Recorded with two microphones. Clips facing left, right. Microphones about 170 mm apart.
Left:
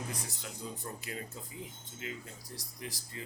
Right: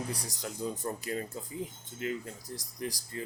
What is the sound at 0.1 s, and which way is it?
Speech, 35° right (ahead or behind).